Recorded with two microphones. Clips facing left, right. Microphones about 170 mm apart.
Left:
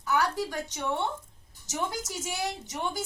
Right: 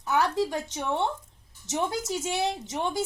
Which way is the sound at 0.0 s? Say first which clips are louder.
Right 3 dB; 20° right (ahead or behind).